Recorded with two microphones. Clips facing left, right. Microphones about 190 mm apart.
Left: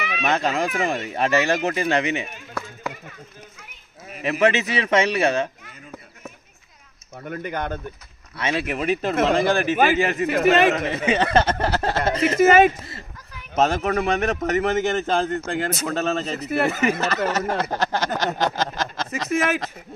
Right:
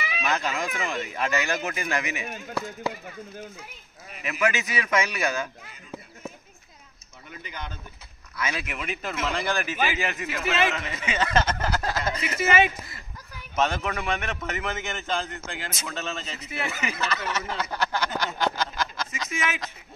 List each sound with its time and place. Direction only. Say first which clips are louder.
0.2 s a man's voice: left 6 dB; 30° left (ahead or behind)
4.2 s a man's voice: left 7 dB; 30° left (ahead or behind)
7.2 s speech: left 12 dB; 55° left (ahead or behind)
8.4 s a man's voice: left 7 dB; 30° left (ahead or behind)
9.1 s speech: left 10 dB; 60° left (ahead or behind)
9.5 s a man's voice: left 8 dB; 35° left (ahead or behind)
10.2 s a man's voice: left 9 dB; 50° left (ahead or behind)